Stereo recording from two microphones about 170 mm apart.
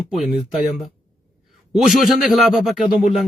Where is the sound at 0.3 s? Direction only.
5° right (ahead or behind).